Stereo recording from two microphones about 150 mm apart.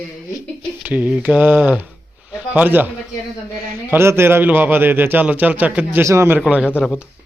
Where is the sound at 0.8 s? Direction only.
10° right (ahead or behind).